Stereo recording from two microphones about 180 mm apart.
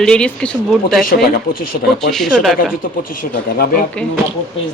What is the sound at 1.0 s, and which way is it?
Speech, 50° left (ahead or behind).